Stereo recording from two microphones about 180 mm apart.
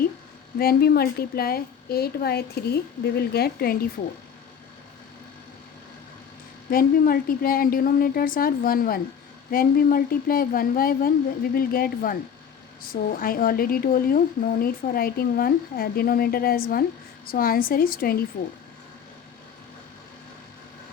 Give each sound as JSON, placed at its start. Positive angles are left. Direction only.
{"t": 0.6, "sound": "a woman's voice", "side_deg": 60}
{"t": 6.7, "sound": "a woman's voice", "side_deg": 55}